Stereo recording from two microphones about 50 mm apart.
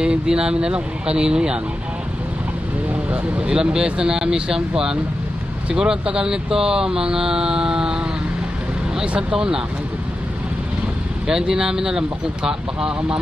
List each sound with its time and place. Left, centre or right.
0.0 s speech: centre
3.1 s speech: centre
11.2 s speech: centre